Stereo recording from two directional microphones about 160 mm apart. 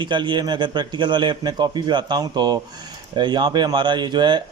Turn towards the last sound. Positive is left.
turn(degrees=-30)  # may be behind; listen again after turning